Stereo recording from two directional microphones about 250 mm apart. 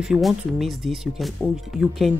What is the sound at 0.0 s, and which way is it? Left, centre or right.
Speech, centre.